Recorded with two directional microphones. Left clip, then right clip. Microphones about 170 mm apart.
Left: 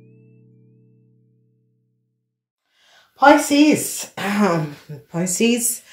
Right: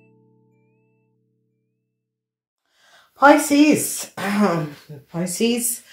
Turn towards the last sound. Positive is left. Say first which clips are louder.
# left 2 dB
turn(degrees=15)  # may be behind; listen again after turning